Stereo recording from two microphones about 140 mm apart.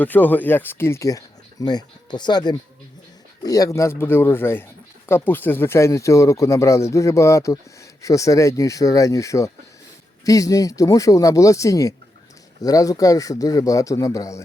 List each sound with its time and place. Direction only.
0.0 s speech: 15° left (ahead or behind)